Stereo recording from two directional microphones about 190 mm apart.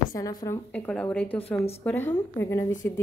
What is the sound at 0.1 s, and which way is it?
Speech, 20° left (ahead or behind).